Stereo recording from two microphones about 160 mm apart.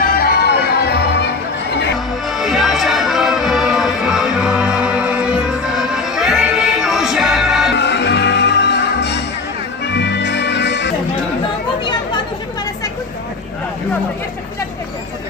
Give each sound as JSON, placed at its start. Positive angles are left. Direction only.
{"t": 0.0, "sound": "music", "side_deg": 70}
{"t": 2.3, "sound": "music", "side_deg": 0}
{"t": 7.8, "sound": "music", "side_deg": 90}